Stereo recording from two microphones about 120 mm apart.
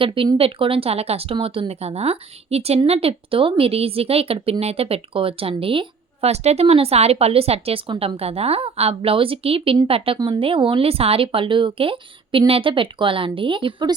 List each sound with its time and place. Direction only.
0.0 s speech: 45° right (ahead or behind)
6.3 s speech: 65° right (ahead or behind)
10.2 s speech: 35° right (ahead or behind)
10.4 s speech: 45° right (ahead or behind)